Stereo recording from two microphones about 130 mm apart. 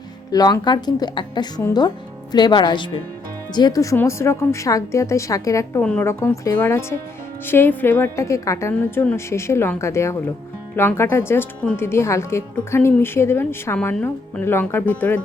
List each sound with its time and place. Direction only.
0.3 s a woman's voice: 30° left (ahead or behind)
5.8 s speech: 10° left (ahead or behind)
6.1 s a woman's voice: 20° left (ahead or behind)
8.7 s speech: 10° left (ahead or behind)
9.1 s a woman's voice: 20° left (ahead or behind)